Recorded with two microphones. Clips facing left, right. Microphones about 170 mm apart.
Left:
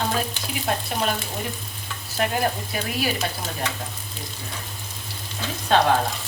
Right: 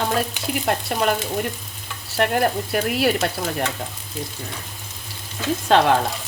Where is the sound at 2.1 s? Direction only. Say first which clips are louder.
Right 4 dB; 65° right (ahead or behind).